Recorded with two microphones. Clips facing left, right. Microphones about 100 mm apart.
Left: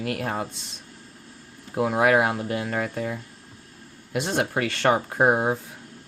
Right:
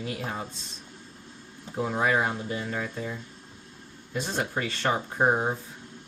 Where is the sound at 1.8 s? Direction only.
70° left (ahead or behind).